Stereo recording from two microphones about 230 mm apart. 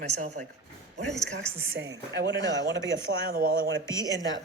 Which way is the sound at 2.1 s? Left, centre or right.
Right.